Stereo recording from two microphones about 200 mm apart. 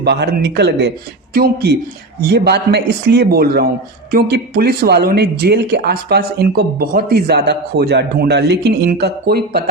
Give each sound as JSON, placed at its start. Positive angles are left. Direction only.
{"t": 0.0, "sound": "a man's voice", "side_deg": -55}